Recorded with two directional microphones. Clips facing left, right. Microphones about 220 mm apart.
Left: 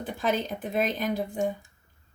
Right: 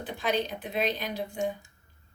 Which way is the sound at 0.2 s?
45° left (ahead or behind).